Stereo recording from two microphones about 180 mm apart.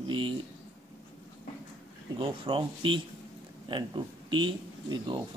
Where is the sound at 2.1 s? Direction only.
30° right (ahead or behind).